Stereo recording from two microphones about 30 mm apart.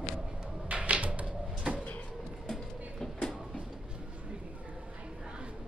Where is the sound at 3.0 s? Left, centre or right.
Centre.